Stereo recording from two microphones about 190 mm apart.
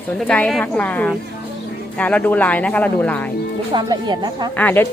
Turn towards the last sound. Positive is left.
turn(degrees=10)  # may be behind; listen again after turning